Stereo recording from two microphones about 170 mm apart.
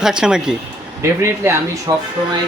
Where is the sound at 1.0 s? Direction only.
15° right (ahead or behind).